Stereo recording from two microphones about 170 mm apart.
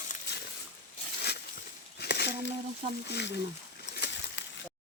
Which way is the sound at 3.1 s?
85° left.